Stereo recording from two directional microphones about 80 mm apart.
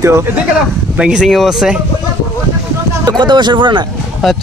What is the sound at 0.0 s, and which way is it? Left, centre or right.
Speech, right.